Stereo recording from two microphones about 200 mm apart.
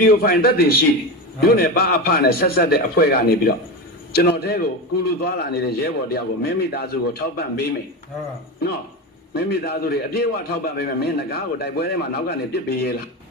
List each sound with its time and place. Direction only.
0.0 s a man's voice: 50° left (ahead or behind)
9.3 s a man's voice: 55° left (ahead or behind)